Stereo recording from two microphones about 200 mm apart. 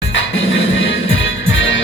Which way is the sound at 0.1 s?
70° left (ahead or behind).